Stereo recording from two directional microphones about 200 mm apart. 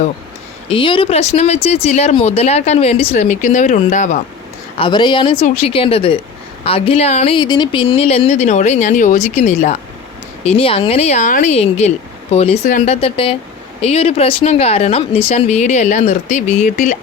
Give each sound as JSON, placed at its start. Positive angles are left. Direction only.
{"t": 0.7, "sound": "speech", "side_deg": 25}
{"t": 4.8, "sound": "speech", "side_deg": 20}